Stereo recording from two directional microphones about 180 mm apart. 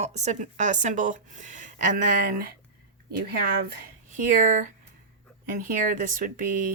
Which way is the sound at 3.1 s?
60° right (ahead or behind).